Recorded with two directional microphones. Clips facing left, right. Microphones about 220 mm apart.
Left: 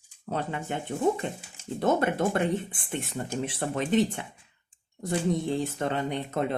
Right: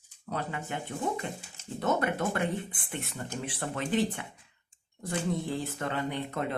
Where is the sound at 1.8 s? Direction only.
25° left (ahead or behind).